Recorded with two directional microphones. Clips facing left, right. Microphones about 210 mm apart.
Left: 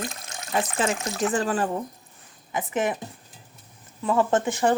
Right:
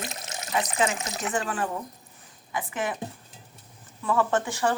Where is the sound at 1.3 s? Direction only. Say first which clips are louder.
Left 3 dB; 35° left (ahead or behind).